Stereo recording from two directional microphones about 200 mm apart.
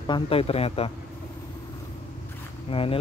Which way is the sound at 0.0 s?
25° left (ahead or behind).